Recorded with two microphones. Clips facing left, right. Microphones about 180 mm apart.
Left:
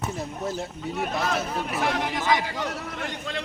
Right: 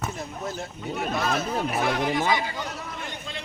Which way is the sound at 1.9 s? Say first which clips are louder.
Right 1 dB; 85° left.